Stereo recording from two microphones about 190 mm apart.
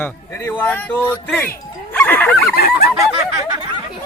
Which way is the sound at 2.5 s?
55° left (ahead or behind).